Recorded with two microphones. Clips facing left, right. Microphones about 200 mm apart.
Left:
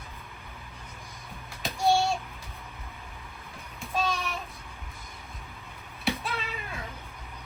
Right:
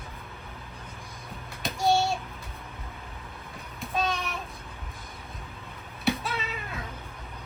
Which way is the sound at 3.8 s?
Centre (ahead or behind).